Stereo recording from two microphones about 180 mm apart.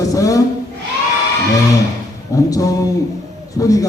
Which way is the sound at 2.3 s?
20° left (ahead or behind).